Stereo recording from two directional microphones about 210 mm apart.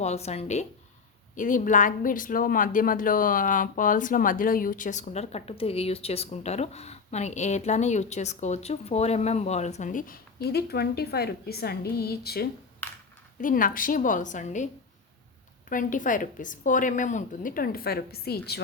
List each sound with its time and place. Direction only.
0.0 s speech: 30° left (ahead or behind)
15.7 s speech: 40° left (ahead or behind)